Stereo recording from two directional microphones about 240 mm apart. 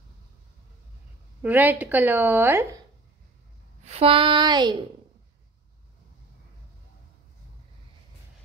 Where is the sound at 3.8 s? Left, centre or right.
Right.